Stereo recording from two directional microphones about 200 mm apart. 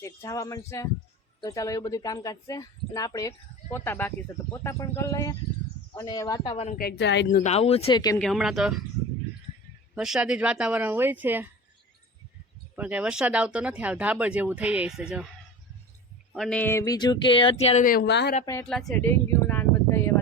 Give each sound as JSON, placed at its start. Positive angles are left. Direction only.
{"t": 0.0, "sound": "speech", "side_deg": 15}
{"t": 6.7, "sound": "speech", "side_deg": 55}
{"t": 7.3, "sound": "speech", "side_deg": 35}
{"t": 8.2, "sound": "speech", "side_deg": 0}
{"t": 9.9, "sound": "speech", "side_deg": -5}
{"t": 12.7, "sound": "speech", "side_deg": -5}
{"t": 16.3, "sound": "speech", "side_deg": 0}
{"t": 18.6, "sound": "a sound", "side_deg": 0}